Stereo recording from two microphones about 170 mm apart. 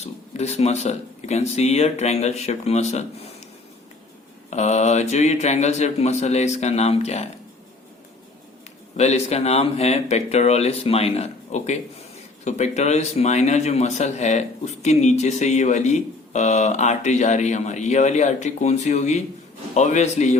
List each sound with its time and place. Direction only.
0.0 s speech: 40° left (ahead or behind)
4.4 s speech: 40° left (ahead or behind)
9.0 s speech: 40° left (ahead or behind)